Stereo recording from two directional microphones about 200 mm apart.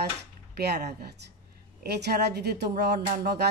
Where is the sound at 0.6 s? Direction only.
55° right (ahead or behind).